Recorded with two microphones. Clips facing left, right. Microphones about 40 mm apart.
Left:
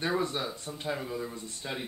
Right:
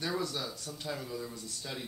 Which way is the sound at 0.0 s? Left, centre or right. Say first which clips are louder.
Left 5 dB; left.